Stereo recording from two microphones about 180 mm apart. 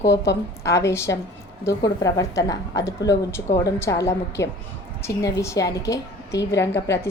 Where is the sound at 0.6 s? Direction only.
15° left (ahead or behind).